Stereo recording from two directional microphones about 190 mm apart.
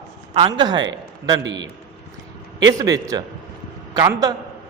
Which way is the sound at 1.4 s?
70° right (ahead or behind).